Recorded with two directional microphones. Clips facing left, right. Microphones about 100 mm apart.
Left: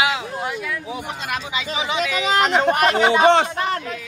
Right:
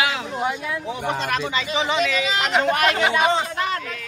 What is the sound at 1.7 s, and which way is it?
Speech, 10° left (ahead or behind).